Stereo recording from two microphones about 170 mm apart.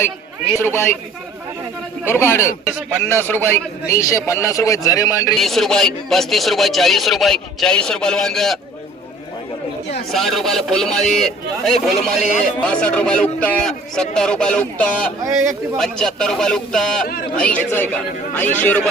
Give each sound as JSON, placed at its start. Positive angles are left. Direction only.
{"t": 0.6, "sound": "a man's voice", "side_deg": 15}
{"t": 2.0, "sound": "a man's voice", "side_deg": 15}
{"t": 5.3, "sound": "speech", "side_deg": 0}
{"t": 10.1, "sound": "a man's voice", "side_deg": 0}